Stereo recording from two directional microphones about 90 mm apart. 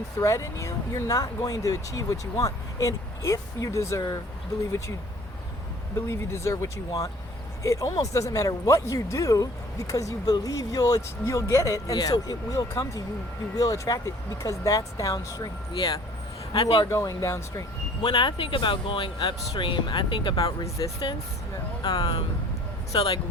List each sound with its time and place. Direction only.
0.2 s speech: 35° left (ahead or behind)
6.1 s speech: 30° left (ahead or behind); by 16.0 s 55° left (ahead or behind)
16.5 s a man's voice: 70° left (ahead or behind)
16.9 s speech: 40° left (ahead or behind)
18.0 s speech: 55° left (ahead or behind)
20.3 s speech: 45° left (ahead or behind)
21.8 s speech: 50° left (ahead or behind)